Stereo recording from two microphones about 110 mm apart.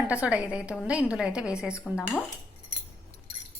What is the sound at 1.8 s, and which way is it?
Speech, 15° left (ahead or behind).